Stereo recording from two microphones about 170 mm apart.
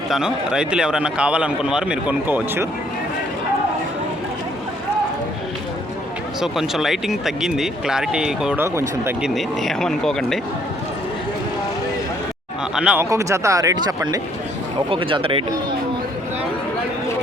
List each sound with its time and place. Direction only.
0.1 s speech: 5° right (ahead or behind)
6.4 s speech: centre (ahead or behind)
9.2 s speech: centre (ahead or behind)
12.7 s speech: 5° right (ahead or behind)
13.1 s speech: 20° right (ahead or behind)